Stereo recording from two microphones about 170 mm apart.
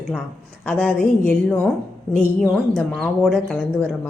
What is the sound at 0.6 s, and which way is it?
A woman's voice, 5° left (ahead or behind).